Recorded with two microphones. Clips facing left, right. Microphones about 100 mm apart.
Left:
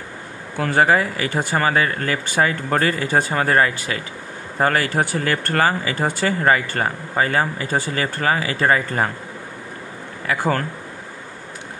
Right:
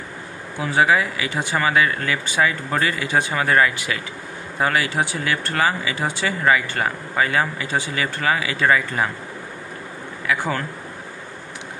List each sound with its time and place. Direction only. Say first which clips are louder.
0.6 s speech: left 2 dB; 55° left (ahead or behind)
10.2 s speech: left 2 dB; 45° left (ahead or behind)